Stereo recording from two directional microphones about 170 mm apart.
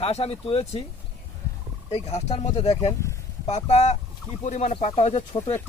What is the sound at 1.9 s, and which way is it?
Speech, 40° left (ahead or behind).